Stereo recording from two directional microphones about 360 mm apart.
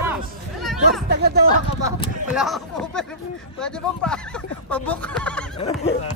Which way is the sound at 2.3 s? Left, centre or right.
Centre.